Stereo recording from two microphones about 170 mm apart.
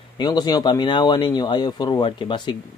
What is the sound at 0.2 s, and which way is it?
Speech, 25° left (ahead or behind).